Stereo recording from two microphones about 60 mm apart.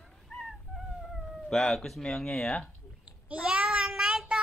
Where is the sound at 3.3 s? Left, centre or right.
Centre.